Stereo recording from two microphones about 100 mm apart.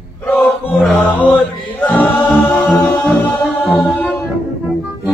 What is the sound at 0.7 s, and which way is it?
Chant, 15° left (ahead or behind).